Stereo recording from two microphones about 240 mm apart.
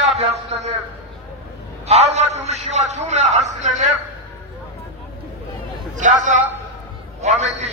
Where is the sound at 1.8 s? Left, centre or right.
Right.